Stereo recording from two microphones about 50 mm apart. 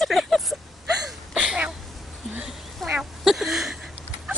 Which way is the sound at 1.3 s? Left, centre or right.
Centre.